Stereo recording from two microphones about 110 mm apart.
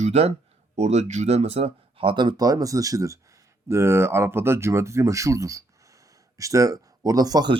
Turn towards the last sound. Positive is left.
turn(degrees=-35)  # may be behind; listen again after turning